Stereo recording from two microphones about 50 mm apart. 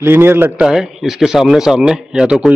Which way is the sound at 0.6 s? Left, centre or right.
Centre.